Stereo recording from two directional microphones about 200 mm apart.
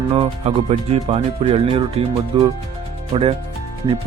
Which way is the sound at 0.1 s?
30° right (ahead or behind).